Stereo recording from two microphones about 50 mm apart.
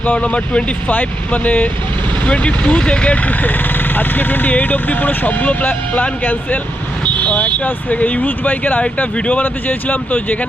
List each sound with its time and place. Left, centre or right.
0.0 s speech: left
8.8 s speech: left
9.4 s speech: left